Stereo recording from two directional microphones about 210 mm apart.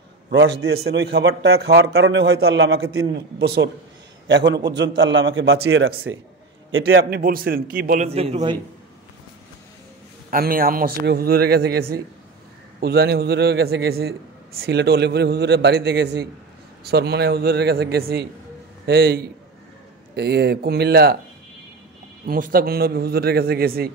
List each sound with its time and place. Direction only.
0.3 s a man's voice: 60° right (ahead or behind)
1.9 s a man's voice: 65° right (ahead or behind)
7.0 s a man's voice: 45° right (ahead or behind); by 8.5 s 30° right (ahead or behind)
10.3 s a man's voice: 45° right (ahead or behind)
12.8 s a man's voice: 50° right (ahead or behind)
22.2 s a man's voice: 45° right (ahead or behind)